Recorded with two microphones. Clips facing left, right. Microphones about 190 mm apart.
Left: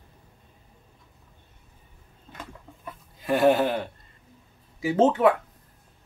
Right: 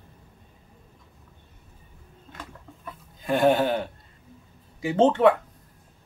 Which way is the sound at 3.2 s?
Centre (ahead or behind).